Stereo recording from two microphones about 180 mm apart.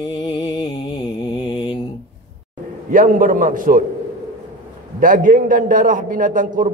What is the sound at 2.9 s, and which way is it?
Speech, 50° right (ahead or behind).